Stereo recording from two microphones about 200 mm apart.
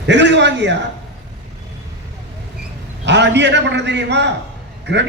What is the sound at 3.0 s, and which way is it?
A man's voice, 60° right (ahead or behind).